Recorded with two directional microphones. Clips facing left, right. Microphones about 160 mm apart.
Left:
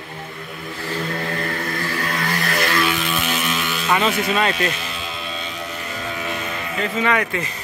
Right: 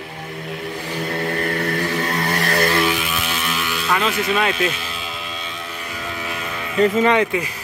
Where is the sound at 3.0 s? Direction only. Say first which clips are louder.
Left 2 dB; centre (ahead or behind).